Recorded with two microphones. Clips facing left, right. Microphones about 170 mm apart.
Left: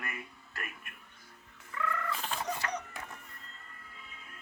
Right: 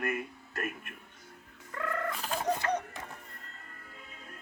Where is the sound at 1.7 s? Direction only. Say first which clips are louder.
Even; 45° right (ahead or behind).